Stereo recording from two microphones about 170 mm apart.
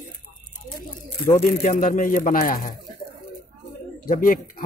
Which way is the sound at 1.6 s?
50° left (ahead or behind).